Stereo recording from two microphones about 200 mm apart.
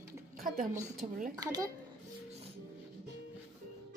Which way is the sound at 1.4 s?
20° right (ahead or behind).